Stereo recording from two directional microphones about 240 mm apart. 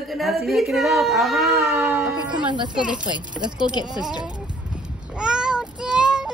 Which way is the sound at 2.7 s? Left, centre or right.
Centre.